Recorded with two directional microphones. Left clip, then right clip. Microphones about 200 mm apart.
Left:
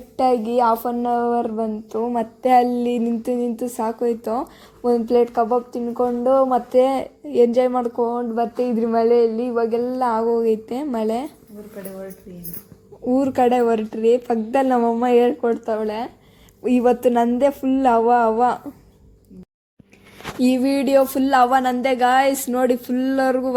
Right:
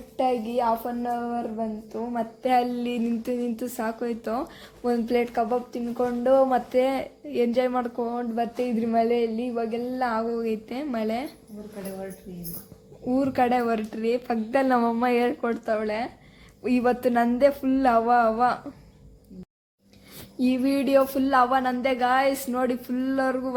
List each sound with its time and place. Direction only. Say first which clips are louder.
0.2 s a woman's voice: left 7 dB; 30° left (ahead or behind); by 11.3 s 15° left (ahead or behind)
13.1 s speech: left 6 dB; 15° left (ahead or behind)
20.4 s a woman's voice: left 5 dB; 20° left (ahead or behind)